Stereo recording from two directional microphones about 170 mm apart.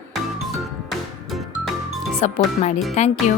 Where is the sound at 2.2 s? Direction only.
40° left (ahead or behind).